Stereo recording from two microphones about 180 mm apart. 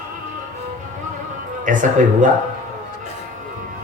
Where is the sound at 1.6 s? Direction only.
45° right (ahead or behind).